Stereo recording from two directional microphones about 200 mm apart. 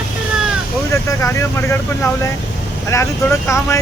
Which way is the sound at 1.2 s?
10° left (ahead or behind).